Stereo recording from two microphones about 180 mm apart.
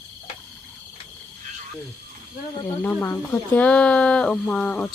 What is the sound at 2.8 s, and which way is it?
Speech, 10° left (ahead or behind).